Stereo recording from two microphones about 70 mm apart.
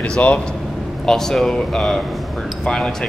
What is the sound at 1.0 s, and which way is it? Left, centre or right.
Speech, centre.